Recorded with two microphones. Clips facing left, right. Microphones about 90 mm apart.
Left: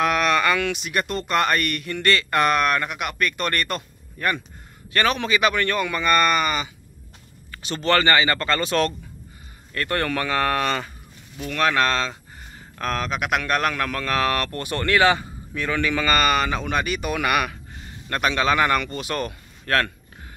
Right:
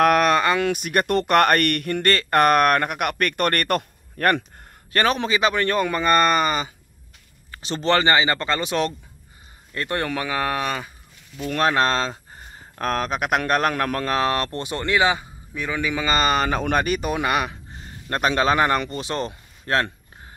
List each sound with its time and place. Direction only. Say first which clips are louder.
0.0 s a sound: right 4 dB; 50° right (ahead or behind)
0.4 s a sound: right 1 dB; 35° right (ahead or behind)
0.7 s speech: right 5 dB; 50° right (ahead or behind)
4.9 s a man's voice: right 1 dB; 35° right (ahead or behind); by 10.9 s 10° right (ahead or behind)
11.4 s a man's voice: right 1 dB; 35° right (ahead or behind); by 16.2 s 15° right (ahead or behind)
16.2 s a man's voice: right 1 dB; 30° right (ahead or behind)
16.4 s speech: right 3 dB; 45° right (ahead or behind)
17.1 s speech: even; 25° right (ahead or behind)